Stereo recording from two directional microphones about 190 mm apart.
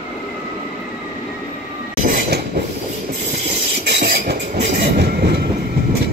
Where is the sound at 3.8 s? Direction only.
60° right (ahead or behind).